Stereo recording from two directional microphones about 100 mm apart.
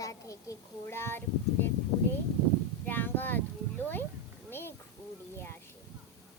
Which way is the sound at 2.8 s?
20° left (ahead or behind).